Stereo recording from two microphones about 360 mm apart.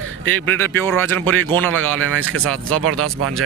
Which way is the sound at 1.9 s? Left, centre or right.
Right.